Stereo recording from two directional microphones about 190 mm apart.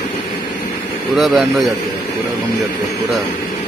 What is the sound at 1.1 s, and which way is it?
Speech, centre (ahead or behind).